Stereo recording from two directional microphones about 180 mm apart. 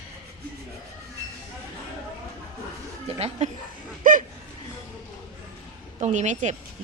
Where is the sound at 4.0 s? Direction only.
45° right (ahead or behind).